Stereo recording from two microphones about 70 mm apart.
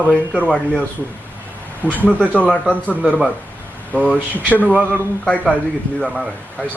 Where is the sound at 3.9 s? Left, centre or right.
Centre.